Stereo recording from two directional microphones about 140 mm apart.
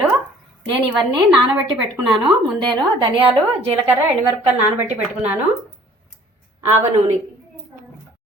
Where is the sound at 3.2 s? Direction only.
45° right (ahead or behind).